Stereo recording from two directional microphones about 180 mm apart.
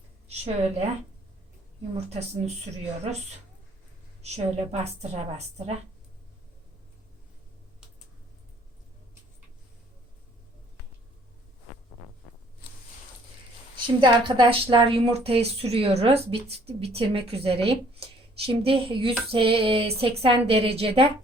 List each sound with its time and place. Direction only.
0.3 s a woman's voice: 35° right (ahead or behind)
4.2 s a woman's voice: 35° right (ahead or behind)
13.7 s a woman's voice: 25° right (ahead or behind)